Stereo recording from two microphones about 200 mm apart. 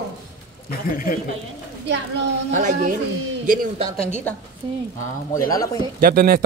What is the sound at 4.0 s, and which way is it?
Speech, 35° left (ahead or behind).